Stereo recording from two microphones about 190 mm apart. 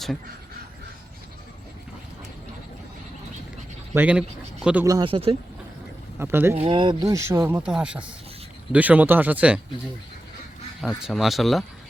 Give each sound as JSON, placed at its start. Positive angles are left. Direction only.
{"t": 3.9, "sound": "speech", "side_deg": -5}
{"t": 4.9, "sound": "speech", "side_deg": -25}
{"t": 6.1, "sound": "speech", "side_deg": -10}
{"t": 6.6, "sound": "speech", "side_deg": -25}
{"t": 10.8, "sound": "speech", "side_deg": 0}